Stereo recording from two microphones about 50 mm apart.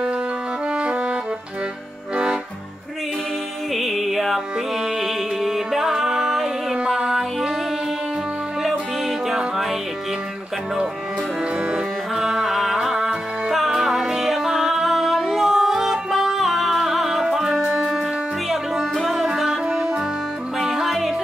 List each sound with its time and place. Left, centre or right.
0.7 s music: centre
3.7 s music: centre
9.3 s music: centre
11.7 s music: centre
19.1 s music: centre